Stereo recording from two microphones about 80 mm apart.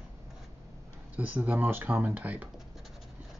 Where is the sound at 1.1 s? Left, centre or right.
Right.